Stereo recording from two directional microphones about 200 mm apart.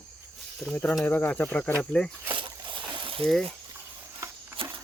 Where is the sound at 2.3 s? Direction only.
25° right (ahead or behind).